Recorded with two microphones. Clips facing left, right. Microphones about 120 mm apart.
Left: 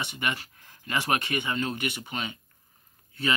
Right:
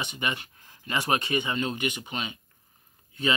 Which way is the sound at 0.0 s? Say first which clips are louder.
Even; 20° right (ahead or behind).